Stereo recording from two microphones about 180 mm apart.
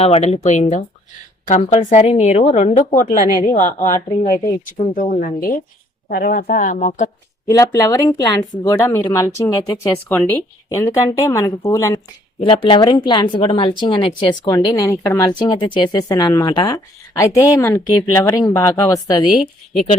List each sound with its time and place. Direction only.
0.0 s a woman's voice: 35° left (ahead or behind)
5.2 s speech: 50° left (ahead or behind)
7.4 s speech: 20° left (ahead or behind)
12.4 s speech: 30° left (ahead or behind)
19.7 s a woman's voice: 40° left (ahead or behind)